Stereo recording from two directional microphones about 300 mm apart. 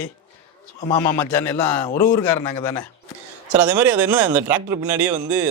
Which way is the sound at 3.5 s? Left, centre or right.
Right.